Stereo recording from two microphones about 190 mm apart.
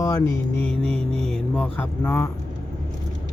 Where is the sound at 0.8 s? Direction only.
30° right (ahead or behind).